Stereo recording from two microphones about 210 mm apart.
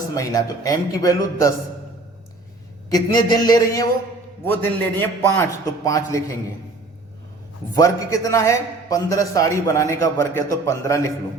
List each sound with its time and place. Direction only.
0.2 s a man's voice: 15° left (ahead or behind)
2.9 s a sound: 20° left (ahead or behind)
4.4 s a man's voice: 10° left (ahead or behind)
7.8 s a man's voice: 15° left (ahead or behind)